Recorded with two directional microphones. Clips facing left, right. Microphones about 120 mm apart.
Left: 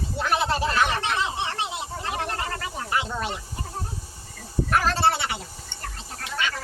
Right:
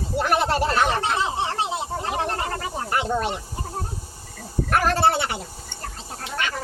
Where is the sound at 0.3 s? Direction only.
50° right (ahead or behind).